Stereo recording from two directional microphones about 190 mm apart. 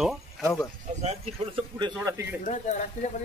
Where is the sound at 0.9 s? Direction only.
35° right (ahead or behind).